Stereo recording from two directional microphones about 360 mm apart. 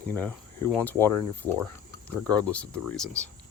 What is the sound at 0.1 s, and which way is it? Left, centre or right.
Speech, centre.